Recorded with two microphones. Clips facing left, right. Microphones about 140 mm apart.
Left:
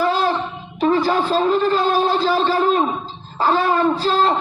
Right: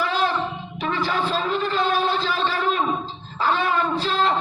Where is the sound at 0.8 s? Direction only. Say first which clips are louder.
Left 8 dB; 35° left (ahead or behind).